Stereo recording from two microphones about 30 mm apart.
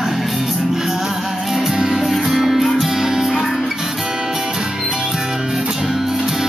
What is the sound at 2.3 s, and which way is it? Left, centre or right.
Music, centre.